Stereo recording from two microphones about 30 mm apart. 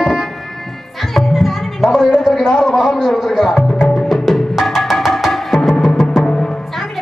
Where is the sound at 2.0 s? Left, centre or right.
Centre.